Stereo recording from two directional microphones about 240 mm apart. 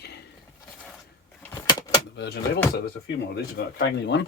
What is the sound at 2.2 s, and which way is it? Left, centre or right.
Speech, left.